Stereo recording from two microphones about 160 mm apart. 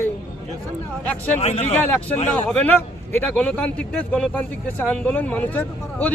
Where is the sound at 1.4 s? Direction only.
40° left (ahead or behind).